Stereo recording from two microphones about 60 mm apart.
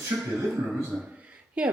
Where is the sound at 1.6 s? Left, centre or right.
Right.